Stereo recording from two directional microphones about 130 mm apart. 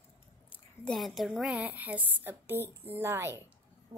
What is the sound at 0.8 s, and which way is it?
A woman's voice, centre (ahead or behind).